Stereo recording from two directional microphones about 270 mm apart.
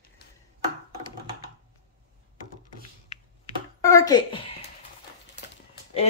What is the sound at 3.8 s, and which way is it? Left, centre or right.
Speech, centre.